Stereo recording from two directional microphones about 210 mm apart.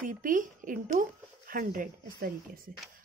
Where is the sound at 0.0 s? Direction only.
40° right (ahead or behind).